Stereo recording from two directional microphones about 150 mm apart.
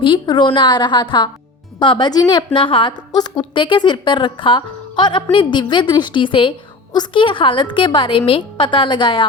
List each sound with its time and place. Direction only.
0.0 s a woman's voice: 30° left (ahead or behind)